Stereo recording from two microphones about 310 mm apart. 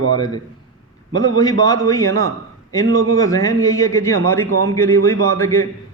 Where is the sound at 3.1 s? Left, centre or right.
Centre.